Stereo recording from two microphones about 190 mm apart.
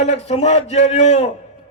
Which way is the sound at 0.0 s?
35° left (ahead or behind).